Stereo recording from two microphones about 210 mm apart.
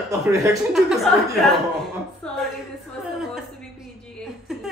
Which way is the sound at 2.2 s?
5° left (ahead or behind).